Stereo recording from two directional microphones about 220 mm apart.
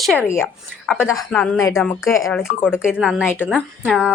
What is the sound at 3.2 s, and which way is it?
Speech, 5° left (ahead or behind).